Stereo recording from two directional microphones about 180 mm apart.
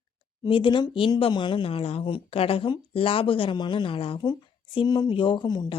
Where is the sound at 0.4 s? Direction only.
25° left (ahead or behind).